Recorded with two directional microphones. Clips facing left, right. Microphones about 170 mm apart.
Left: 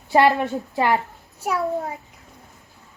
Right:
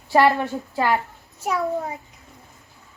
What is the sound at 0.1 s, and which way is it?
Speech, 20° left (ahead or behind).